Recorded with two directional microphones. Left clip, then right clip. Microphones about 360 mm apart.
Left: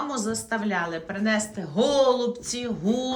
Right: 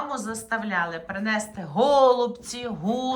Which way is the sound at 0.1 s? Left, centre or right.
Centre.